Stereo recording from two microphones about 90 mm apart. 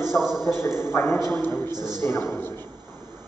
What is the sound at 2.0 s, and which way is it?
Speech, 25° left (ahead or behind).